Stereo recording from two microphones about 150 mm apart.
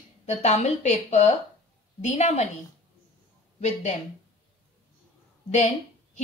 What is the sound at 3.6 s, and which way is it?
Speech, 50° left (ahead or behind).